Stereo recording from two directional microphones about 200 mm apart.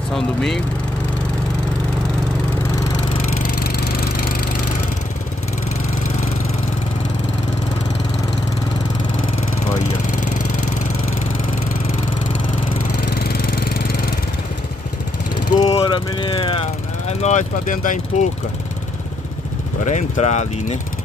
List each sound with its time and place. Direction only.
0.1 s speech: centre (ahead or behind)
15.5 s vehicle: 25° left (ahead or behind)
17.1 s speech: 35° left (ahead or behind)
19.8 s speech: 35° left (ahead or behind)